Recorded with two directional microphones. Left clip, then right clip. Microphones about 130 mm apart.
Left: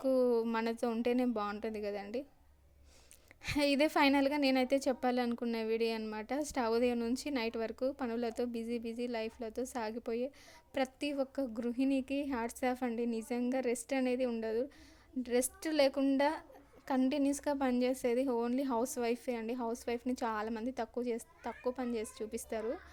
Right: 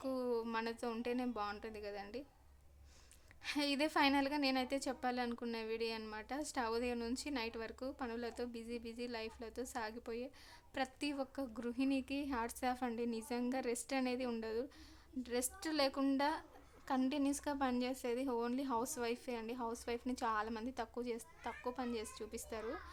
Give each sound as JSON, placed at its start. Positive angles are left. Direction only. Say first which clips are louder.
{"t": 0.0, "sound": "a woman's voice", "louder": "left 9 dB", "side_deg": 35}
{"t": 3.4, "sound": "speech", "louder": "left 7 dB", "side_deg": 40}
{"t": 11.0, "sound": "speech", "louder": "left 6 dB", "side_deg": 20}